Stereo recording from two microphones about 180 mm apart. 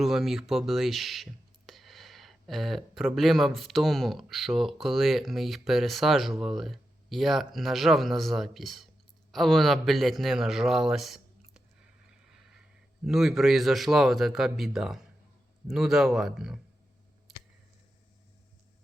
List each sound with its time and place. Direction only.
0.0 s a man's voice: centre (ahead or behind)
12.1 s vehicle: 5° right (ahead or behind)
13.1 s speech: centre (ahead or behind)